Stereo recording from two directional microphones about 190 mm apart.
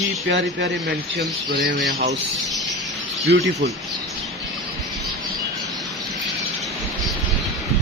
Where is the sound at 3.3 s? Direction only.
60° right (ahead or behind).